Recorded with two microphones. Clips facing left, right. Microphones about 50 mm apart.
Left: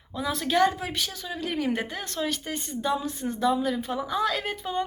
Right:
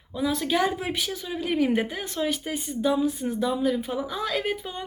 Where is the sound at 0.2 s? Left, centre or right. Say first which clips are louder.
Left 1 dB; centre.